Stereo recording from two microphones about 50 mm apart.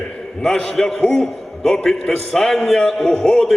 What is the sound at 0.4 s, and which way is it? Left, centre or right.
Speech, centre.